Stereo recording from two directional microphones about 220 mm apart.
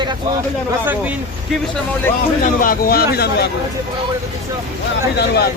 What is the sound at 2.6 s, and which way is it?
Speech, 40° left (ahead or behind).